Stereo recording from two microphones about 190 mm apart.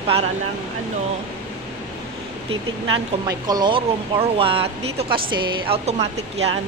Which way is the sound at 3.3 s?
20° right (ahead or behind).